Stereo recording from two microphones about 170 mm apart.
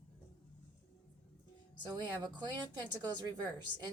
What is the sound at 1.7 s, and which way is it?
Speech, 25° right (ahead or behind).